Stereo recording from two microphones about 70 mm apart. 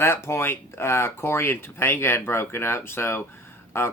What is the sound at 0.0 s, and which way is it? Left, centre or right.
Speech, left.